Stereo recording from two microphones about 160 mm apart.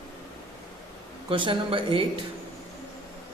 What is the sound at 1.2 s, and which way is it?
Speech, 30° right (ahead or behind).